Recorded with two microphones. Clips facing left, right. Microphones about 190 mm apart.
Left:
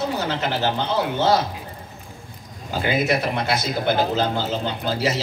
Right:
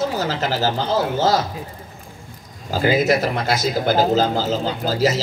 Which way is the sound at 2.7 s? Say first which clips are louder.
Right 4 dB; 40° right (ahead or behind).